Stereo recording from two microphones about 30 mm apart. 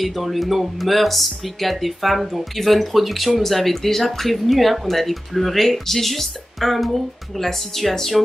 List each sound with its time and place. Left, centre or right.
0.0 s speech: centre